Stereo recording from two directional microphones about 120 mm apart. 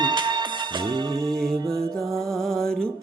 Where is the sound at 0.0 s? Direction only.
40° right (ahead or behind).